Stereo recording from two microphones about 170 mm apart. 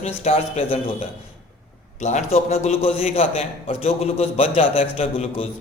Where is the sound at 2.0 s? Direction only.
40° left (ahead or behind).